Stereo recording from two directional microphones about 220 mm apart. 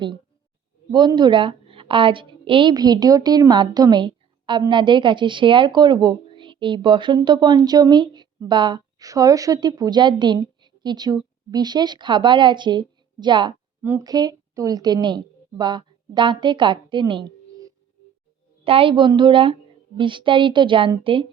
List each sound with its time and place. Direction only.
0.9 s a woman's voice: 20° right (ahead or behind)